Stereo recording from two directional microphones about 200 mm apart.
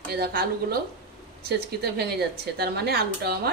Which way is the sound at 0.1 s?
50° right (ahead or behind).